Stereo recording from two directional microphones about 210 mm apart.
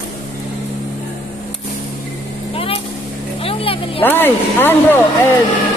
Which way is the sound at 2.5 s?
25° left (ahead or behind).